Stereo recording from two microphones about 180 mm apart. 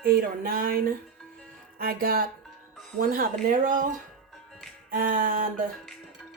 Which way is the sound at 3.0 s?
50° right (ahead or behind).